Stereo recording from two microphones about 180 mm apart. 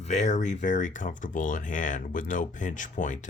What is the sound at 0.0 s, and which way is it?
Speech, 40° left (ahead or behind).